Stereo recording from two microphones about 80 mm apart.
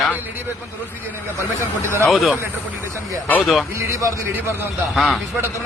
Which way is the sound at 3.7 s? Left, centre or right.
Right.